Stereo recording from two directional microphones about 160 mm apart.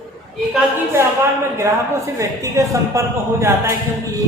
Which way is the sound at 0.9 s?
15° right (ahead or behind).